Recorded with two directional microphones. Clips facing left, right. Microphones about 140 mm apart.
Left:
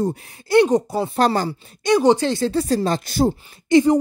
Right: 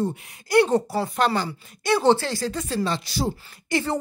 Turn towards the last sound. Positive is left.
turn(degrees=20)  # may be behind; listen again after turning